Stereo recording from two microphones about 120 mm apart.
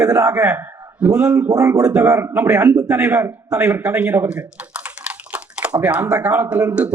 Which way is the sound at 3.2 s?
25° right (ahead or behind).